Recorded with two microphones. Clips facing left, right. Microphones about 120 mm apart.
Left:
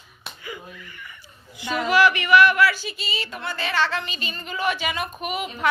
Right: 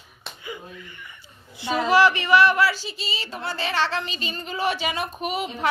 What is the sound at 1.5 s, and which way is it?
Speech, 30° right (ahead or behind).